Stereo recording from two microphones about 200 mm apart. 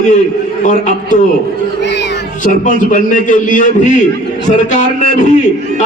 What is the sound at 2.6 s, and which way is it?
A man's voice, 40° left (ahead or behind).